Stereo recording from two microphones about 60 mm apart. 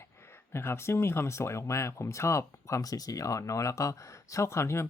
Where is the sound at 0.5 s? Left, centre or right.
Left.